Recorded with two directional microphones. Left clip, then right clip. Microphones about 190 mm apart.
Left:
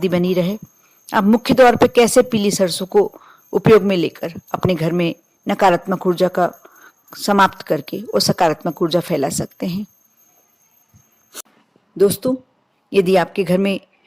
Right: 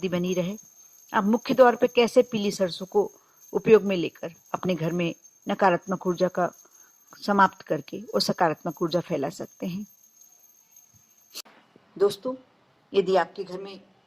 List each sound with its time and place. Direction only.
0.0 s a woman's voice: 40° left (ahead or behind)
11.9 s a woman's voice: 40° left (ahead or behind)
12.9 s a woman's voice: 15° left (ahead or behind)